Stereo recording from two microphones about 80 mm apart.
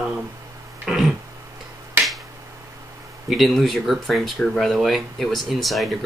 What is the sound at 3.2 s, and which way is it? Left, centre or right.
Speech, centre.